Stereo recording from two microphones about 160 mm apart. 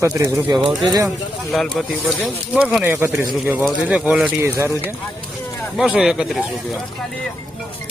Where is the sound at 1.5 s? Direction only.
Centre (ahead or behind); by 4.8 s 15° right (ahead or behind).